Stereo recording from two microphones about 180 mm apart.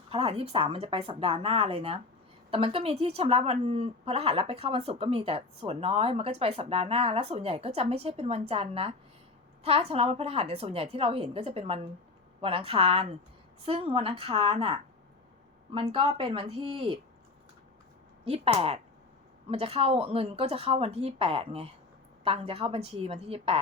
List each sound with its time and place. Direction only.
0.1 s a woman's voice: 30° right (ahead or behind)
18.3 s a woman's voice: 30° right (ahead or behind)